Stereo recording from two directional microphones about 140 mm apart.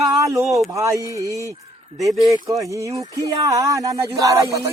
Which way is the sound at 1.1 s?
25° right (ahead or behind).